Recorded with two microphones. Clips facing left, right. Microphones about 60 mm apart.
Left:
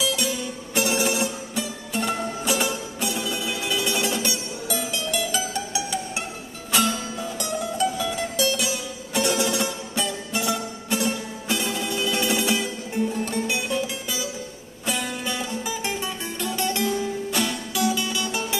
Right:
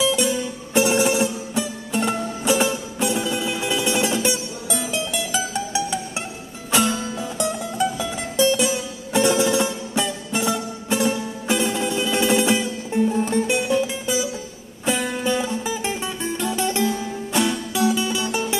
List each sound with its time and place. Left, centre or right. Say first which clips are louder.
0.0 s music: right 5 dB; right
12.3 s music: right 4 dB; right
15.2 s music: right 6 dB; centre